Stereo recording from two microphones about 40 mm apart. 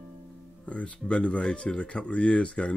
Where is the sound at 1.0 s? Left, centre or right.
Left.